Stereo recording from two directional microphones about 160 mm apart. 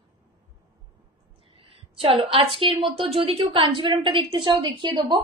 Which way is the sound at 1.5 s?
35° right (ahead or behind).